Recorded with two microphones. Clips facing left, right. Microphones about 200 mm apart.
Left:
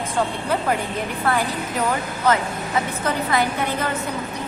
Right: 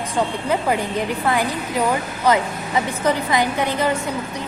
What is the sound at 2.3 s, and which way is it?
Speech, 15° right (ahead or behind).